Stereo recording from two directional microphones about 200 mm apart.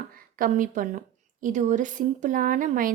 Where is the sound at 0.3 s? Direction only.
40° right (ahead or behind).